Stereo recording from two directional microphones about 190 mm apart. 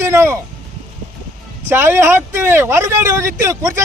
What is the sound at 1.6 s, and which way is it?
Speech, 10° right (ahead or behind).